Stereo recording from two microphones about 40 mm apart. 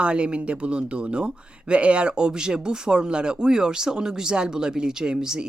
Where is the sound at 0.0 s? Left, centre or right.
Right.